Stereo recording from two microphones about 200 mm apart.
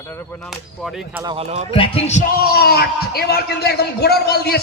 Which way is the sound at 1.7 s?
25° left (ahead or behind).